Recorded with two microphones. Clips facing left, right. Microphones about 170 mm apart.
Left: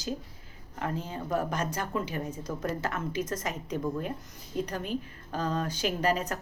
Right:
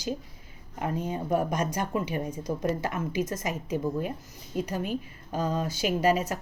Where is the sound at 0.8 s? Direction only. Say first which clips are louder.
Right 4 dB; 20° right (ahead or behind).